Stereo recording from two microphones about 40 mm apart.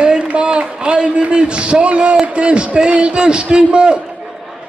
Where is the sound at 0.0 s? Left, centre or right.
Right.